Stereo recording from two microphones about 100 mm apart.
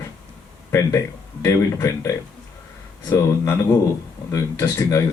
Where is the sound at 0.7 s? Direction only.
30° left (ahead or behind).